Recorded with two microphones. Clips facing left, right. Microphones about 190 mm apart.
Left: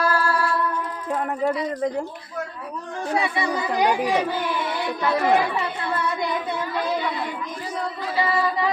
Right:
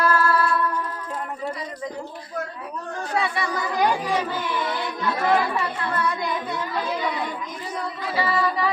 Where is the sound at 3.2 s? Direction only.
15° left (ahead or behind).